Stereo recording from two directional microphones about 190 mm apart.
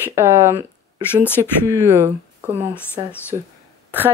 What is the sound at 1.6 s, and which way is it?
Speech, 15° right (ahead or behind).